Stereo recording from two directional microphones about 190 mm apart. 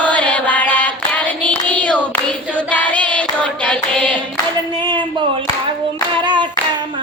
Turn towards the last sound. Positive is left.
turn(degrees=-25)  # may be behind; listen again after turning